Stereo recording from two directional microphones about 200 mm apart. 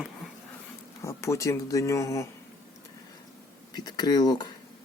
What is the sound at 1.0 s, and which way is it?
Speech, 15° left (ahead or behind).